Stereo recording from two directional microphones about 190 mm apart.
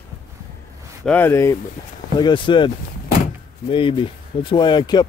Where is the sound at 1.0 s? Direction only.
10° left (ahead or behind).